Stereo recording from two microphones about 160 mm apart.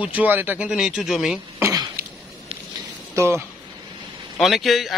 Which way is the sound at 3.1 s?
20° right (ahead or behind).